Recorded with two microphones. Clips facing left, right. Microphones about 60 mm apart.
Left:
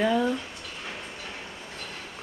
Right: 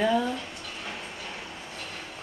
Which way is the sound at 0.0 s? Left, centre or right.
Centre.